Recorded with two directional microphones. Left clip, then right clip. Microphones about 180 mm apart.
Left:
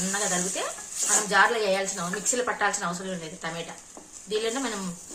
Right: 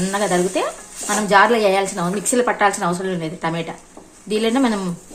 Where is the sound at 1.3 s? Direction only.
55° right (ahead or behind).